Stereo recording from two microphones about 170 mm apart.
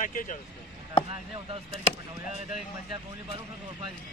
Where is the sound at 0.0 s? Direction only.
50° left (ahead or behind).